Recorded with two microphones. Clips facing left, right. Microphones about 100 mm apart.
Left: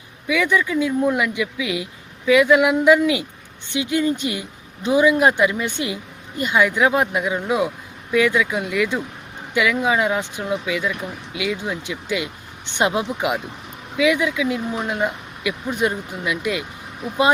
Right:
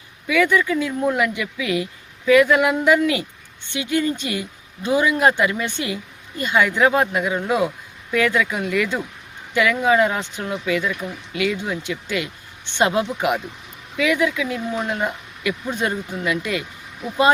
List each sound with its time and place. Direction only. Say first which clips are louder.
0.3 s speech: right 2 dB; 15° left (ahead or behind)